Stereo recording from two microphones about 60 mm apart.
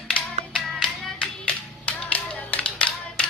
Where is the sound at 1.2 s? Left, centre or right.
Left.